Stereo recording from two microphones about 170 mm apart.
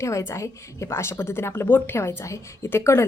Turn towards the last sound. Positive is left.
turn(degrees=15)  # may be behind; listen again after turning